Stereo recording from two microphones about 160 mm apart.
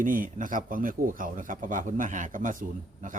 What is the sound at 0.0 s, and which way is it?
A man's voice, 55° right (ahead or behind).